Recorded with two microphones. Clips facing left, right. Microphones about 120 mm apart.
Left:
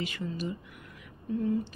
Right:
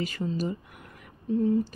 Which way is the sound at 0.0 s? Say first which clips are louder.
Right 4 dB; 40° right (ahead or behind).